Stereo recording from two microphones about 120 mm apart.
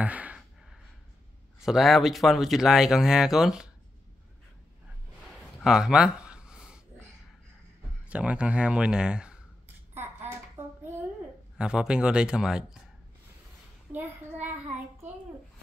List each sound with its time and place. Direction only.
0.0 s gasp: 10° right (ahead or behind)
1.6 s speech: 5° right (ahead or behind)
5.3 s a sound: centre (ahead or behind)
8.1 s speech: 10° right (ahead or behind)
10.3 s a sound: 20° right (ahead or behind)
11.5 s speech: 5° right (ahead or behind)